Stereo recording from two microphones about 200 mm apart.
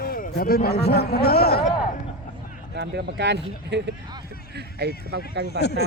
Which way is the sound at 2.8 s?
55° right (ahead or behind).